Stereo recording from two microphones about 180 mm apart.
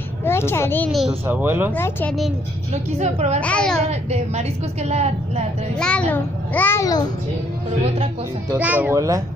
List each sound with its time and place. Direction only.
0.2 s a child's voice: 15° left (ahead or behind)
0.9 s speech: 5° right (ahead or behind)
1.7 s a child's voice: 10° left (ahead or behind)
2.7 s a woman's voice: 40° right (ahead or behind)
3.3 s a child's voice: 5° left (ahead or behind)
3.9 s a woman's voice: 35° right (ahead or behind)
5.8 s a child's voice: 5° left (ahead or behind)
8.5 s speech: 10° right (ahead or behind)